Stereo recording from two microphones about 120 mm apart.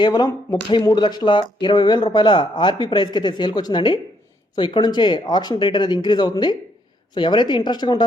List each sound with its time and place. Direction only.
0.0 s speech: 35° left (ahead or behind)